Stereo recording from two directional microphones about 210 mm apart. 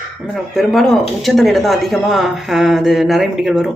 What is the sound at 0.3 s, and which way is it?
Speech, centre (ahead or behind).